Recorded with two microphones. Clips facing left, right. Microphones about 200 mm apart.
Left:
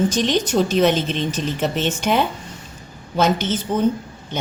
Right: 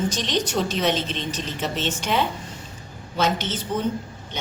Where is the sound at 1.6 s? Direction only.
50° left (ahead or behind).